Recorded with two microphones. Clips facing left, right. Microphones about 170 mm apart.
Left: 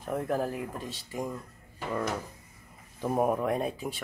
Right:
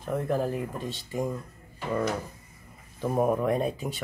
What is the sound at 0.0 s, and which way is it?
Speech, 5° left (ahead or behind).